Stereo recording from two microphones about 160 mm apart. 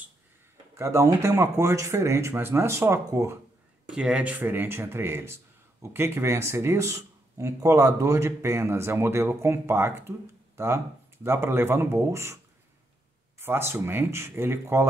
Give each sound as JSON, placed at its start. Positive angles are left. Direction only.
{"t": 0.7, "sound": "speech", "side_deg": -15}
{"t": 3.8, "sound": "speech", "side_deg": -5}
{"t": 13.4, "sound": "speech", "side_deg": -15}